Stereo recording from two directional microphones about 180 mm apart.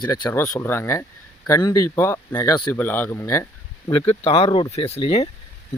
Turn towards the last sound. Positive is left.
turn(degrees=35)  # may be behind; listen again after turning